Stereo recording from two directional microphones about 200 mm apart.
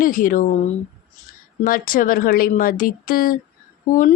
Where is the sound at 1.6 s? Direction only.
45° left (ahead or behind).